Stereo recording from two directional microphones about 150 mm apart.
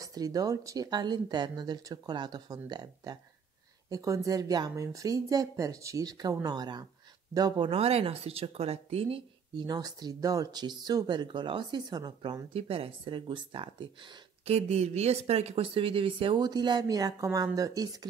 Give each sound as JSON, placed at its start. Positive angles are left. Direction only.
{"t": 0.0, "sound": "speech", "side_deg": -25}
{"t": 9.7, "sound": "speech", "side_deg": -25}
{"t": 12.5, "sound": "speech", "side_deg": -40}
{"t": 14.4, "sound": "speech", "side_deg": -45}